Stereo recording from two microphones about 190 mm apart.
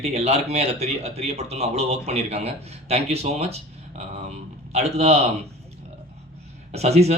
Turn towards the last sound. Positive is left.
turn(degrees=-35)  # may be behind; listen again after turning